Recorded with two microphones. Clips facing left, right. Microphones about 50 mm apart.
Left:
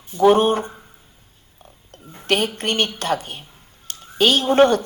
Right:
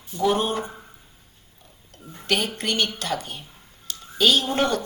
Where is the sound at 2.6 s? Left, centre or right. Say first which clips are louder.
Left 3 dB; left.